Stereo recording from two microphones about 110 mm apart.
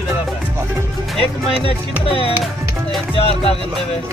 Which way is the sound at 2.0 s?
60° left (ahead or behind).